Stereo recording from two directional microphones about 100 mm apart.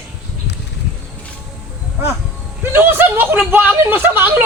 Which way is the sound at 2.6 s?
20° right (ahead or behind).